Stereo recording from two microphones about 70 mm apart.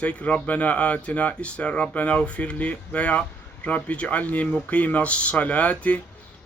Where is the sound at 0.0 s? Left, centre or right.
Centre.